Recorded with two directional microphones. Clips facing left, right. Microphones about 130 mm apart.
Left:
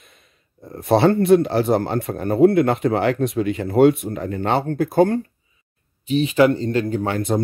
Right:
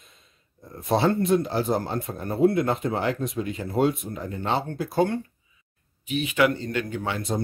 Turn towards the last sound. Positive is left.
turn(degrees=55)  # may be behind; listen again after turning